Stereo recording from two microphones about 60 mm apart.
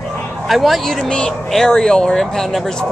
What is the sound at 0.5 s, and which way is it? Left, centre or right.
Speech, centre.